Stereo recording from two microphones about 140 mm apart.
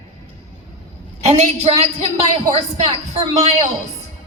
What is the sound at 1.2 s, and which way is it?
A woman's voice, 50° right (ahead or behind).